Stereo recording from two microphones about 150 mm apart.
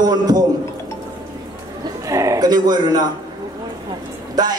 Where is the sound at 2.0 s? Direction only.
20° right (ahead or behind).